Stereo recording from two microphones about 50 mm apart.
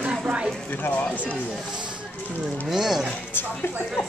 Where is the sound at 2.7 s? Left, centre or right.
Centre.